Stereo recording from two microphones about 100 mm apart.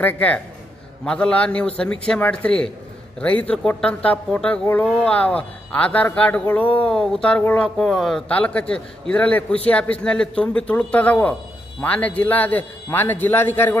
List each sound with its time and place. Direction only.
0.0 s a man's voice: 15° left (ahead or behind)
8.3 s a man's voice: 15° left (ahead or behind)